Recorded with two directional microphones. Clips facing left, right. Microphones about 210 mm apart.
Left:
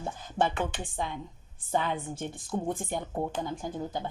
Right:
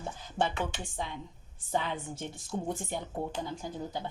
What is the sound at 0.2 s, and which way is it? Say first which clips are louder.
Speech: left 3 dB; 50° left (ahead or behind).